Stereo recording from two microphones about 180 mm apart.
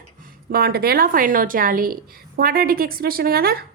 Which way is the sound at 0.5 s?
60° right (ahead or behind).